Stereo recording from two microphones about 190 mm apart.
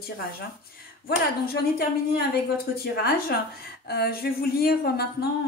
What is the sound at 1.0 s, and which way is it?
A woman's voice, 55° left (ahead or behind).